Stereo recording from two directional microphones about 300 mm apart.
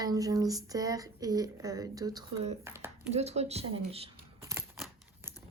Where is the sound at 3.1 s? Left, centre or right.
Right.